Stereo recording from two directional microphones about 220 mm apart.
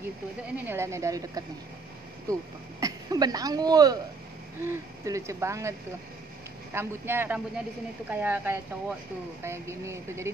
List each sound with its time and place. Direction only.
0.7 s speech: 10° right (ahead or behind)